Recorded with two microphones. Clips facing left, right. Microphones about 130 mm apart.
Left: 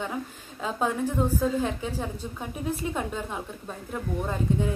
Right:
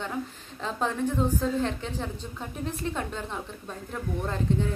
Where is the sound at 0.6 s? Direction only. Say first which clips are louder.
Left 2 dB; 10° left (ahead or behind).